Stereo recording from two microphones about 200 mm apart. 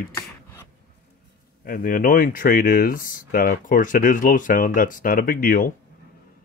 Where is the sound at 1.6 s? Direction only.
45° left (ahead or behind).